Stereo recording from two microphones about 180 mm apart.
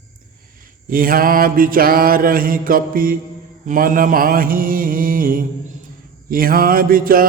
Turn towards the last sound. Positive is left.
turn(degrees=-55)  # may be behind; listen again after turning